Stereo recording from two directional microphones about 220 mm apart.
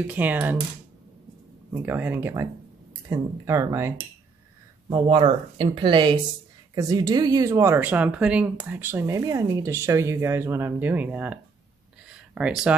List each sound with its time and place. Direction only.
0.0 s speech: 10° right (ahead or behind)
1.7 s speech: 5° right (ahead or behind)
4.8 s speech: 25° right (ahead or behind); by 11.3 s 5° right (ahead or behind)
12.1 s a sound: 5° right (ahead or behind)